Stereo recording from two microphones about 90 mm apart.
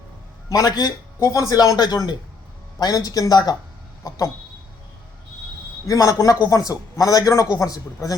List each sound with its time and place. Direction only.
0.5 s speech: 45° left (ahead or behind)
5.9 s a man's voice: 40° left (ahead or behind)